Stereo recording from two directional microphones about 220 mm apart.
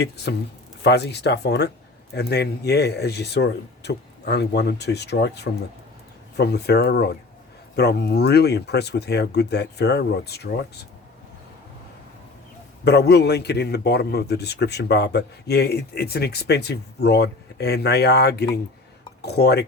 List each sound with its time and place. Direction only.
0.8 s a man's voice: 50° left (ahead or behind)
12.8 s a man's voice: 50° left (ahead or behind)